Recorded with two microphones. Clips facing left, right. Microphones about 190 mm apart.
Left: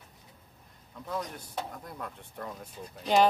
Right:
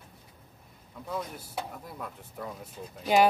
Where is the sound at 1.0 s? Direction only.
5° right (ahead or behind).